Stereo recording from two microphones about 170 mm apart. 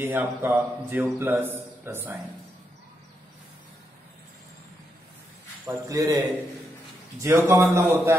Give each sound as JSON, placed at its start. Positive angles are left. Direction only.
{"t": 0.0, "sound": "a man's voice", "side_deg": -15}
{"t": 5.7, "sound": "a man's voice", "side_deg": -15}